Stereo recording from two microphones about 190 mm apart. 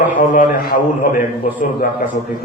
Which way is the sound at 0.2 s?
45° left (ahead or behind).